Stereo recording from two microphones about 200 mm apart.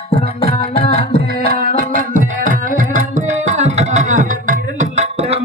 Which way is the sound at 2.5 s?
40° right (ahead or behind).